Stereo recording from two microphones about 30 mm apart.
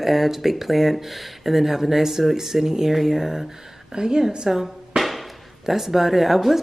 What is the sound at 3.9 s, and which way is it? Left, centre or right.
Speech, right.